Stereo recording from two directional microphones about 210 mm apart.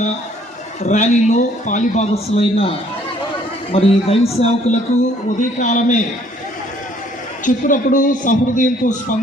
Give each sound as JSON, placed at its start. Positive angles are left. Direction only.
{"t": 0.8, "sound": "a man's voice", "side_deg": 35}
{"t": 7.4, "sound": "a man's voice", "side_deg": 40}